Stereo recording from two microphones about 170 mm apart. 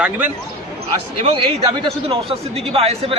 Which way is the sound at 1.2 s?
35° right (ahead or behind).